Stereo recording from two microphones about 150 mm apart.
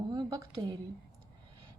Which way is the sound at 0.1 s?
25° right (ahead or behind).